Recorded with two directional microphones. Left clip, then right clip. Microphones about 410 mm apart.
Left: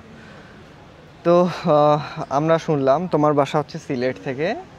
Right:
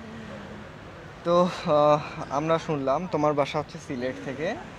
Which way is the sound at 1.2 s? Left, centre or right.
Left.